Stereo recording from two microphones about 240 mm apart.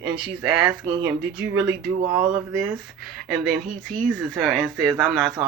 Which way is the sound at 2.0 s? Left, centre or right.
Centre.